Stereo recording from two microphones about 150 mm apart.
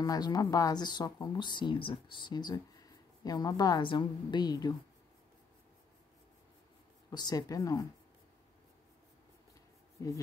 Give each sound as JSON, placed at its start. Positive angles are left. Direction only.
{"t": 0.0, "sound": "speech", "side_deg": 25}
{"t": 7.1, "sound": "speech", "side_deg": 25}